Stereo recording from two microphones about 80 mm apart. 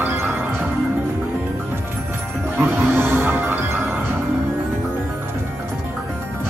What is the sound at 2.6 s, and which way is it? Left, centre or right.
Music, right.